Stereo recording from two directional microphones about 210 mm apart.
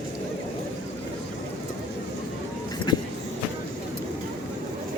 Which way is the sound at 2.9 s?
20° left (ahead or behind).